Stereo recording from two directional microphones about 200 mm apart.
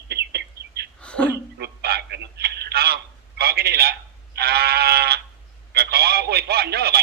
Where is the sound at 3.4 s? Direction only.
55° right (ahead or behind).